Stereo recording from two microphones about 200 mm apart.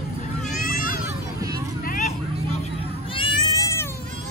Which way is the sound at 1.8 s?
40° left (ahead or behind).